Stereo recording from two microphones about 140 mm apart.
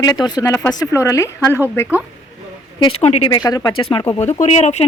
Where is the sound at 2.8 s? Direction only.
40° left (ahead or behind).